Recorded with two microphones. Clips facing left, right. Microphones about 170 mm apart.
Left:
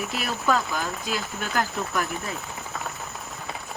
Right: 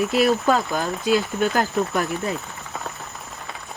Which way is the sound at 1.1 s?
25° right (ahead or behind).